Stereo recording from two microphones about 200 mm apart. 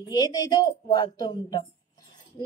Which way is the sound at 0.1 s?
20° left (ahead or behind).